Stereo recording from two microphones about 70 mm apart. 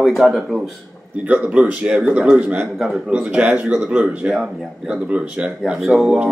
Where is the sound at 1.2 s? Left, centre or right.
Right.